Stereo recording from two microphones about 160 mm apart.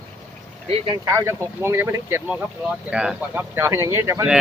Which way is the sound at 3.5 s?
15° right (ahead or behind).